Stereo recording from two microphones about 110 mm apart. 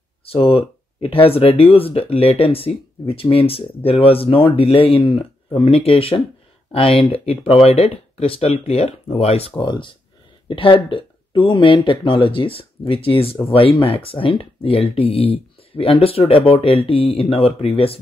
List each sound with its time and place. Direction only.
0.2 s speech: 60° left (ahead or behind)
9.6 s speech: 50° left (ahead or behind)